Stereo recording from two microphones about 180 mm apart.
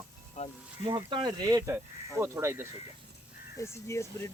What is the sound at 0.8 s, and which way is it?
Speech, 25° right (ahead or behind).